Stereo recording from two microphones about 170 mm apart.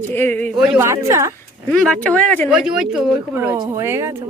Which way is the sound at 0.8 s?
15° right (ahead or behind).